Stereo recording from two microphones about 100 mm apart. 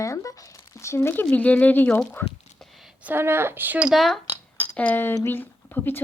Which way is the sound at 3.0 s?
20° right (ahead or behind).